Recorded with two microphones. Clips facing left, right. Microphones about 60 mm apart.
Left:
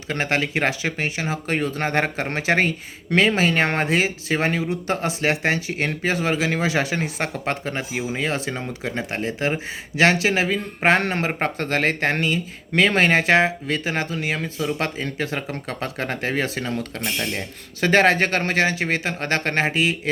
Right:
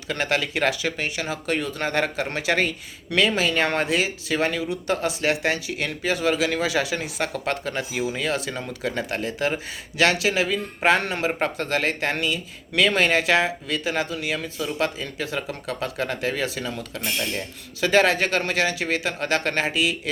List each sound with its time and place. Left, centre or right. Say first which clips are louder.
0.1 s speech: left 2 dB; left